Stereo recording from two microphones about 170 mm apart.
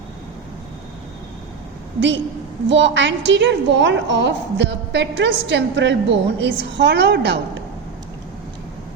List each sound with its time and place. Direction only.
2.6 s a woman's voice: 90° right